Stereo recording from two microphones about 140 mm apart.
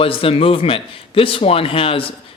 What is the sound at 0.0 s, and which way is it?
Speech, 40° left (ahead or behind).